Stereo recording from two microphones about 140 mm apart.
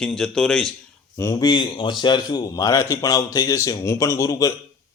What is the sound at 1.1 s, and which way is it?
A man's voice, 25° left (ahead or behind).